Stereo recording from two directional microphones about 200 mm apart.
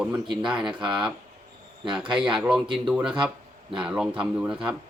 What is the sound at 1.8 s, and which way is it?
Speech, 25° right (ahead or behind).